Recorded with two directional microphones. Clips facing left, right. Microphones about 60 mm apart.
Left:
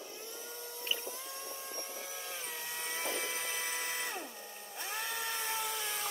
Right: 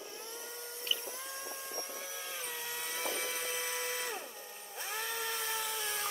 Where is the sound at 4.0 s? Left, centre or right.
Centre.